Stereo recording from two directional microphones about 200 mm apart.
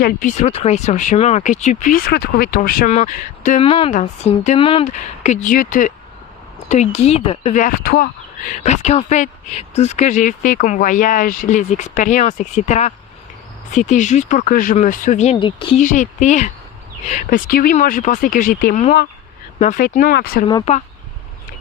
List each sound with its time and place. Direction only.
0.0 s speech: 40° left (ahead or behind)
8.5 s speech: 35° left (ahead or behind)
15.8 s speech: 40° left (ahead or behind)
20.4 s speech: 20° left (ahead or behind)